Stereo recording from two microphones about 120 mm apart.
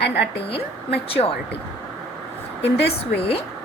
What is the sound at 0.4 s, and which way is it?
Speech, 50° left (ahead or behind).